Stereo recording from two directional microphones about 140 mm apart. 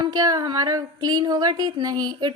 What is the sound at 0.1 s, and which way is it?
A woman's voice, 30° right (ahead or behind).